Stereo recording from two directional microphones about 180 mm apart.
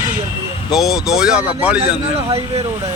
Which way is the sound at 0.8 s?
Centre (ahead or behind).